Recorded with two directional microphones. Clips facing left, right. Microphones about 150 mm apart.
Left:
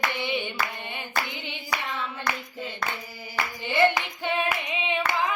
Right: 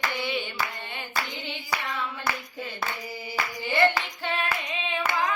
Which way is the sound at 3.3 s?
20° left (ahead or behind).